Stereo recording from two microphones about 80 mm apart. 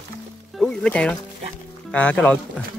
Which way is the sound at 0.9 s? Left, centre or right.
Centre.